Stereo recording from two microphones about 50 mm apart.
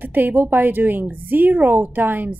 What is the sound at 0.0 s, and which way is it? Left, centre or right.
Speech, right.